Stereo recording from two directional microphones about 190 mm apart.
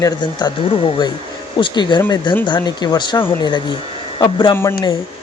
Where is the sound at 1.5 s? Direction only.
25° left (ahead or behind).